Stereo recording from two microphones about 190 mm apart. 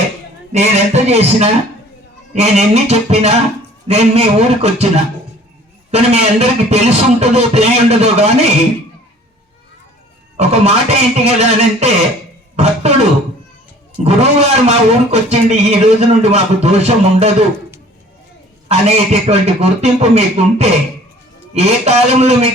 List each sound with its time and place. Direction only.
0.5 s speech: 35° right (ahead or behind)
5.9 s speech: 35° right (ahead or behind)
10.3 s speech: 35° right (ahead or behind)
14.0 s speech: 35° right (ahead or behind)
18.7 s speech: 35° right (ahead or behind)